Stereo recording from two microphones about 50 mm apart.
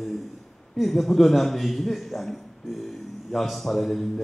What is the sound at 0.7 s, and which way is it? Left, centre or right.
Speech, centre.